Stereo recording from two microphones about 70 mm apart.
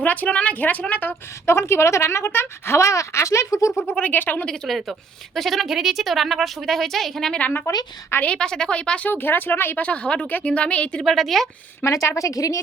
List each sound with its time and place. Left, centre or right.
0.0 s speech: left
1.5 s speech: left
3.8 s speech: left
4.4 s a woman's voice: centre
7.7 s speech: left
8.2 s a woman's voice: centre
9.0 s speech: left
9.8 s a woman's voice: centre
11.0 s a woman's voice: centre
11.9 s speech: left